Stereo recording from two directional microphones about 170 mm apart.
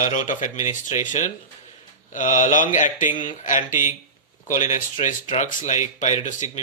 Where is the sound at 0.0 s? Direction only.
50° left (ahead or behind).